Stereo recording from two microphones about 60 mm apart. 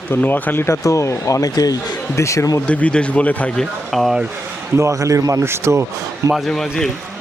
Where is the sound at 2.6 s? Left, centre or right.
Left.